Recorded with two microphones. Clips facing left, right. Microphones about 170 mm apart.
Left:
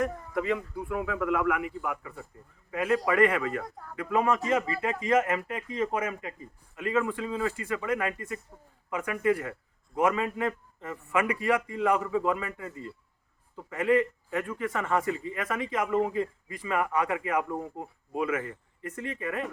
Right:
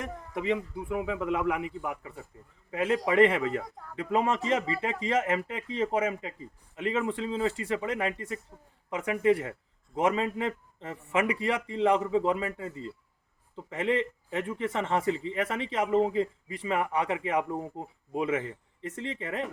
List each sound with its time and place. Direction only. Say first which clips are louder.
0.0 s a man's voice: left 4 dB; 20° right (ahead or behind)